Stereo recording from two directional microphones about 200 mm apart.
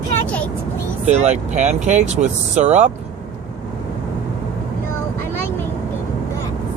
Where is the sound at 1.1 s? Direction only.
35° right (ahead or behind).